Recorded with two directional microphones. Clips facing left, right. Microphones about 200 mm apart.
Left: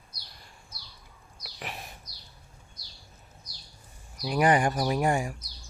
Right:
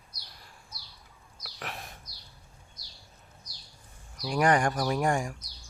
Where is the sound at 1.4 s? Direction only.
Centre (ahead or behind).